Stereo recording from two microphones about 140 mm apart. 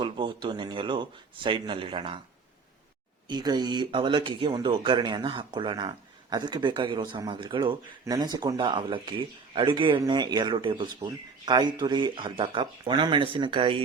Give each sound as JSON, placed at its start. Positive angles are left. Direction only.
{"t": 0.0, "sound": "speech", "side_deg": -35}
{"t": 3.2, "sound": "speech", "side_deg": -30}
{"t": 8.6, "sound": "speech", "side_deg": -35}